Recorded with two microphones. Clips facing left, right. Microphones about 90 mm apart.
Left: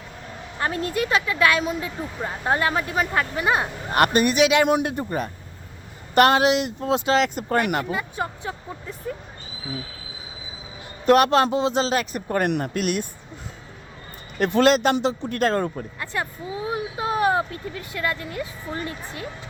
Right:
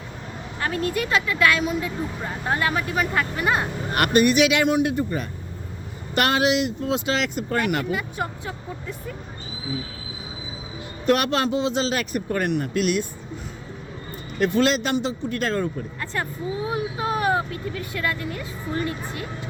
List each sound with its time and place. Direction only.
0.6 s speech: 25° left (ahead or behind)
3.9 s speech: 30° left (ahead or behind)
11.0 s speech: 40° left (ahead or behind)
12.6 s speech: 50° left (ahead or behind)
14.3 s speech: 55° left (ahead or behind)
15.3 s speech: 45° left (ahead or behind)
16.1 s speech: 15° left (ahead or behind)